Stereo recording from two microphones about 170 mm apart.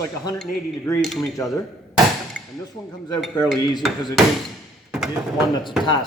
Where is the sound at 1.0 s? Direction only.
Centre (ahead or behind).